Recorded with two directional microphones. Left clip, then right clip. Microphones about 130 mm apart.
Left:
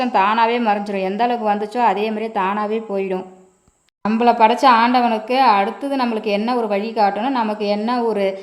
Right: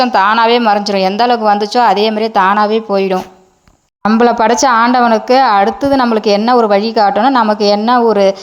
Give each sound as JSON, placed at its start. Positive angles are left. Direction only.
{"t": 0.0, "sound": "a woman's voice", "side_deg": -25}
{"t": 4.2, "sound": "a woman's voice", "side_deg": -45}